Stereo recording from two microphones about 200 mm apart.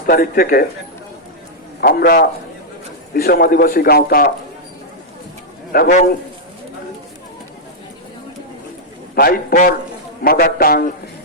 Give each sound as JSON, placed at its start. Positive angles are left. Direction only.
{"t": 0.1, "sound": "a man's voice", "side_deg": 45}
{"t": 1.8, "sound": "a man's voice", "side_deg": 50}
{"t": 5.7, "sound": "a man's voice", "side_deg": 50}
{"t": 9.1, "sound": "a man's voice", "side_deg": 50}